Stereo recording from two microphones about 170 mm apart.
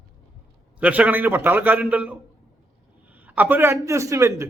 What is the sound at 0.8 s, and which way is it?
A man's voice, 10° right (ahead or behind).